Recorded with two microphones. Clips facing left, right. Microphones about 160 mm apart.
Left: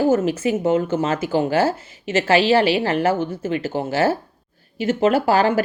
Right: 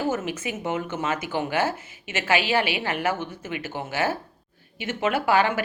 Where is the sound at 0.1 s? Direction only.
35° left (ahead or behind).